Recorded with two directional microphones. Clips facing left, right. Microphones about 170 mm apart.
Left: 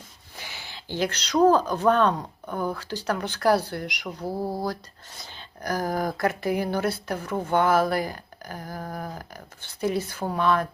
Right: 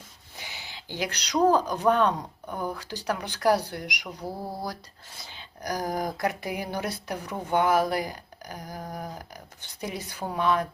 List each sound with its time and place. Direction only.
0.3 s speech: 20° right (ahead or behind)
5.3 s speech: 15° right (ahead or behind)